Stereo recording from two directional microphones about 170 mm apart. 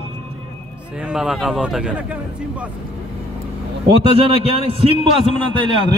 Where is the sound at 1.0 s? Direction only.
5° right (ahead or behind).